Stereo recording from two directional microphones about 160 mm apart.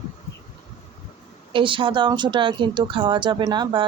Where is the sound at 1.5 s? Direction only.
30° right (ahead or behind).